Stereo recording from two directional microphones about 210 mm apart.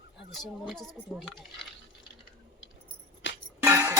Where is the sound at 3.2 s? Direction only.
65° left (ahead or behind).